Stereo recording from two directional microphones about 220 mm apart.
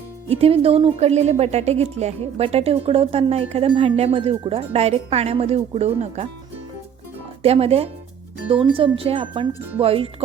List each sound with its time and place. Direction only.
0.3 s speech: 25° right (ahead or behind)
7.4 s speech: 25° right (ahead or behind)